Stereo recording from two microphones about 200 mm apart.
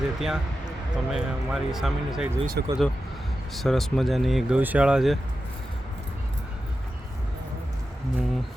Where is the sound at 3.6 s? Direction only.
Centre (ahead or behind).